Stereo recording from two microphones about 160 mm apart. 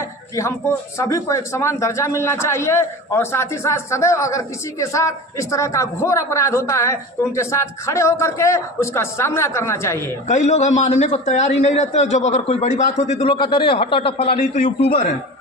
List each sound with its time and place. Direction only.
0.4 s a man's voice: 15° left (ahead or behind)
10.2 s a man's voice: 45° left (ahead or behind)
13.2 s a man's voice: 30° left (ahead or behind)
14.9 s a man's voice: 55° left (ahead or behind)